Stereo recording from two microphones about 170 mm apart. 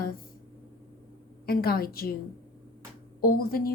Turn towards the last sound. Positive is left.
turn(degrees=60)  # may be behind; listen again after turning